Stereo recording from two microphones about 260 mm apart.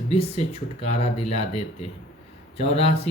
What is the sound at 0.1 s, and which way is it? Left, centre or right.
Speech, left.